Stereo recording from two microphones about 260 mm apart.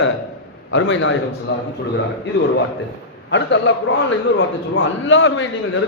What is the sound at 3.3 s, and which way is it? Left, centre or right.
Speech, left.